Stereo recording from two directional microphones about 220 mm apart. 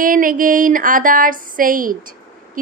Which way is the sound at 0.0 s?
40° right (ahead or behind).